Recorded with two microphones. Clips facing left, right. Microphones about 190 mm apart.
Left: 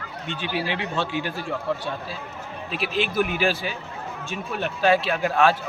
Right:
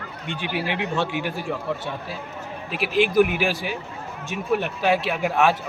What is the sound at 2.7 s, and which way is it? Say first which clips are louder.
A man's voice: right 5 dB; 15° right (ahead or behind).